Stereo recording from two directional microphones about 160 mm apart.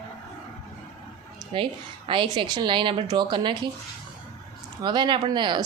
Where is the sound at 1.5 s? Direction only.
35° right (ahead or behind).